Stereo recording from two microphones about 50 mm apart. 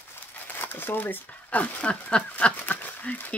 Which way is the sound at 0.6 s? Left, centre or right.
Left.